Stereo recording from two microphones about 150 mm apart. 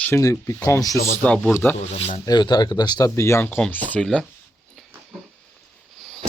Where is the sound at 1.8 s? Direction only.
45° left (ahead or behind).